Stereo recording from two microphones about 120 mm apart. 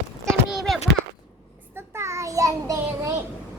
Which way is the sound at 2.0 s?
25° right (ahead or behind).